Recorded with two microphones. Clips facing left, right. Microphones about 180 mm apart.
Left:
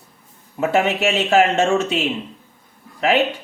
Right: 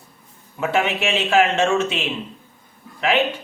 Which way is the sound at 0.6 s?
40° left (ahead or behind).